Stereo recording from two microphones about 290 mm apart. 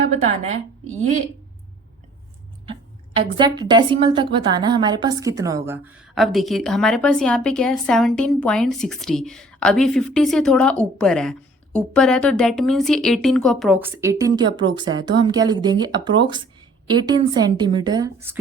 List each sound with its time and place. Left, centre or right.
0.1 s a woman's voice: right
3.3 s a woman's voice: centre